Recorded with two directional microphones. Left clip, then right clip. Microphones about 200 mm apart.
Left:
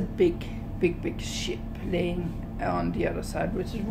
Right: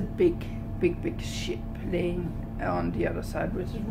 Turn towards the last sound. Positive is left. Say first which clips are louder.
# left 1 dB
turn(degrees=0)  # may be behind; listen again after turning